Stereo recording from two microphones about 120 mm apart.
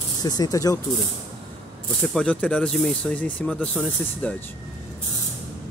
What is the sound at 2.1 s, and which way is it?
Speech, 10° left (ahead or behind).